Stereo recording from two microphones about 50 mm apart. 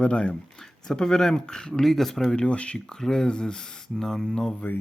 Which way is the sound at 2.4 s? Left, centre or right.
Left.